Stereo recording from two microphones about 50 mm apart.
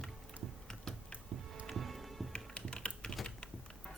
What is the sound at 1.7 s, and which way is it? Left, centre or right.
Music, centre.